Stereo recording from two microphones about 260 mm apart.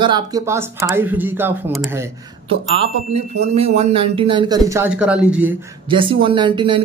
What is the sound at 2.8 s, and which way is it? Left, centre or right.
Speech, right.